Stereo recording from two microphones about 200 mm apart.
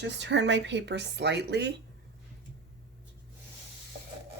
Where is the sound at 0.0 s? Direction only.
60° right (ahead or behind).